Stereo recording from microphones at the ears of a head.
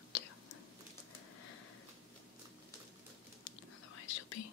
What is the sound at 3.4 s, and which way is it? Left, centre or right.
Whispering, left.